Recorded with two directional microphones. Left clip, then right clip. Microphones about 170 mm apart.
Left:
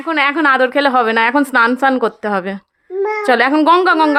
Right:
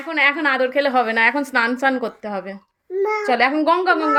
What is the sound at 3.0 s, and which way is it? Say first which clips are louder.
Speech: left 3 dB; 20° left (ahead or behind).